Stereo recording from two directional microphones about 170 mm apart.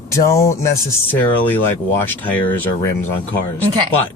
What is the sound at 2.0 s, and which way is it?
Speech, 10° left (ahead or behind).